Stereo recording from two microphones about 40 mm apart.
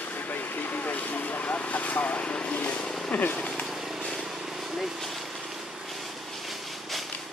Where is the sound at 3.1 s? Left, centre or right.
Left.